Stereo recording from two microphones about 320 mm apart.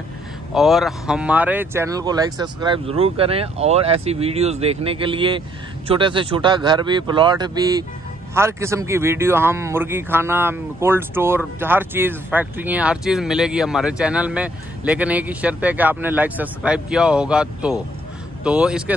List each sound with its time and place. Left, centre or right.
0.6 s speech: centre